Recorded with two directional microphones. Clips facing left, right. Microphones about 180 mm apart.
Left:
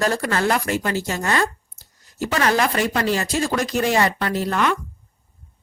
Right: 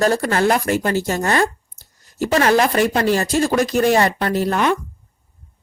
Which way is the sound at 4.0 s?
45° right (ahead or behind).